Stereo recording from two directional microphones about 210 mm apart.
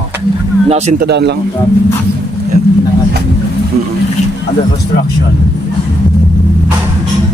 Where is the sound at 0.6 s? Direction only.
30° right (ahead or behind).